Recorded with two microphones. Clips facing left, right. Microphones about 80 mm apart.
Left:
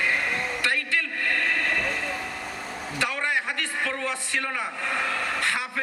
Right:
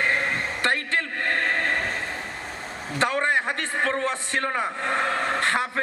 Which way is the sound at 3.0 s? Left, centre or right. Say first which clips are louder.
Right 5 dB; right.